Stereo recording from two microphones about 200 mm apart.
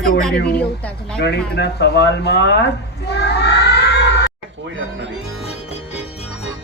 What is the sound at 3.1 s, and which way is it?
Cat, 55° left (ahead or behind).